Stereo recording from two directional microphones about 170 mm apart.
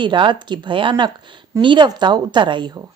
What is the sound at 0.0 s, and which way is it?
Speech, 25° right (ahead or behind).